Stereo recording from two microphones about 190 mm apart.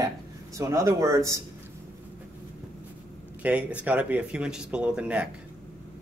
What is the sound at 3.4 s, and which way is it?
Speech, 5° right (ahead or behind).